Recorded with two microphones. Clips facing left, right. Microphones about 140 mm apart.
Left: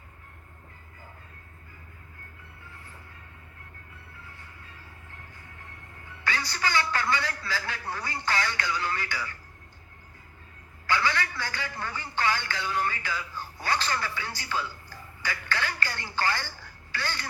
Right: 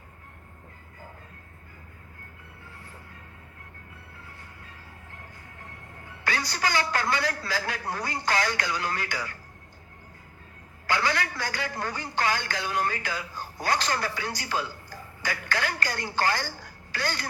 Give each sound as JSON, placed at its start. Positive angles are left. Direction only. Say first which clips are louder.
{"t": 6.2, "sound": "a man's voice", "louder": "right 2 dB", "side_deg": -40}
{"t": 10.9, "sound": "a man's voice", "louder": "right 1 dB", "side_deg": -40}